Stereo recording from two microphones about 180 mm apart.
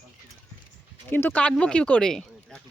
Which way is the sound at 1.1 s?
10° left (ahead or behind).